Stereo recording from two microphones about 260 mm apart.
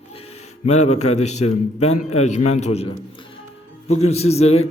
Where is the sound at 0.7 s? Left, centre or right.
Left.